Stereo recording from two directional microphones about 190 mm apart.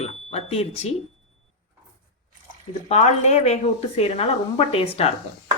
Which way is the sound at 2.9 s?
35° left (ahead or behind).